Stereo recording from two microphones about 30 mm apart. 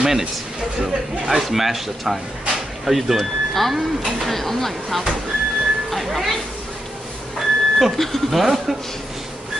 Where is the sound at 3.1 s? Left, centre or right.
Centre.